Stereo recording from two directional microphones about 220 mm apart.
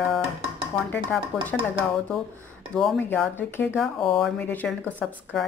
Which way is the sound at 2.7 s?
5° left (ahead or behind).